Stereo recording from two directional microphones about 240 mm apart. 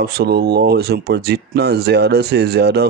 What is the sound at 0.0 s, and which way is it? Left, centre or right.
Speech, right.